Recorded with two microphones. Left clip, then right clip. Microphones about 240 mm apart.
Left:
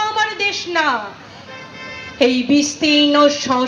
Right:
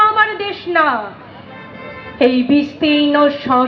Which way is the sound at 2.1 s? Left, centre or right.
Left.